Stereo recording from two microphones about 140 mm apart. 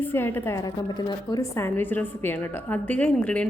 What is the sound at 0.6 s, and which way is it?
Speech, 30° left (ahead or behind).